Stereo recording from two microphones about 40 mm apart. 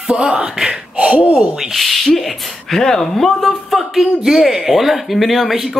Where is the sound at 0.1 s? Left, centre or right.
Right.